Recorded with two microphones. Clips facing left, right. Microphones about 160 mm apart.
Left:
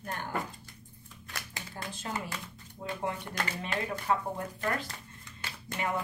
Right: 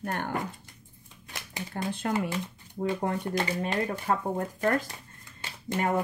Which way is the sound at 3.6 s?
45° right (ahead or behind).